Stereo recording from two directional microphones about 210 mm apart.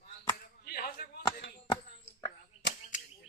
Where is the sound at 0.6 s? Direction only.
45° left (ahead or behind).